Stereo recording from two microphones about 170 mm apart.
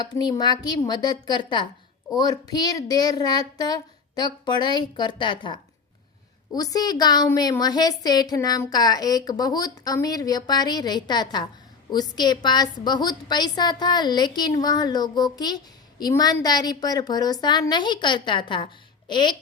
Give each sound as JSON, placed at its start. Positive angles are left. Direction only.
{"t": 0.0, "sound": "a woman's voice", "side_deg": 25}